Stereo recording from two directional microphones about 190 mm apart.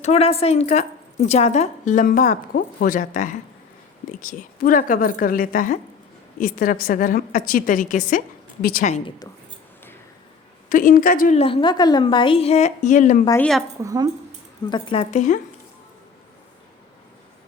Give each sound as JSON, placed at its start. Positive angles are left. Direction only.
{"t": 0.0, "sound": "a woman's voice", "side_deg": 35}
{"t": 9.0, "sound": "speech", "side_deg": 20}
{"t": 10.7, "sound": "a woman's voice", "side_deg": 45}
{"t": 13.4, "sound": "speech", "side_deg": 0}
{"t": 13.8, "sound": "speech", "side_deg": -20}
{"t": 14.7, "sound": "speech", "side_deg": 25}